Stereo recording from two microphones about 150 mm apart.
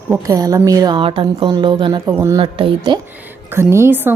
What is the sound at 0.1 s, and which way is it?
A woman's voice, 25° right (ahead or behind).